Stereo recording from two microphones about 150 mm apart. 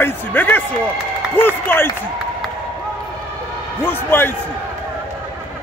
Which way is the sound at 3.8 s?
15° left (ahead or behind).